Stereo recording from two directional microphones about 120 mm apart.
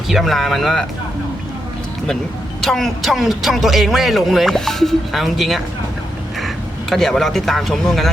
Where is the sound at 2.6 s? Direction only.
Centre (ahead or behind).